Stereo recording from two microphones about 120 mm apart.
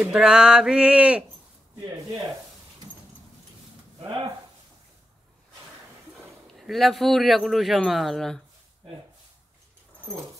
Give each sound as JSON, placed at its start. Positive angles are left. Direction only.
{"t": 0.0, "sound": "a sound", "side_deg": -5}
{"t": 4.0, "sound": "speech", "side_deg": -40}
{"t": 6.6, "sound": "a man's voice", "side_deg": 0}